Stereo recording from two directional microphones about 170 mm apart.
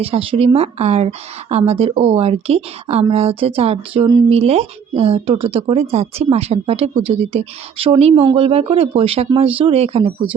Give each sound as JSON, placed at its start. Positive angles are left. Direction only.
{"t": 0.0, "sound": "speech", "side_deg": -35}